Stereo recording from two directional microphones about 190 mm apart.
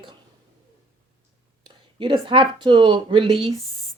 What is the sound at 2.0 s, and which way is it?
A woman's voice, 25° right (ahead or behind).